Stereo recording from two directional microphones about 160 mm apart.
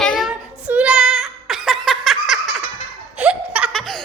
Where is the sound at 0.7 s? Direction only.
5° right (ahead or behind).